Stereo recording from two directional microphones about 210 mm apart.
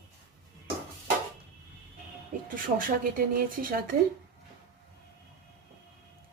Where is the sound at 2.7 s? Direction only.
40° right (ahead or behind).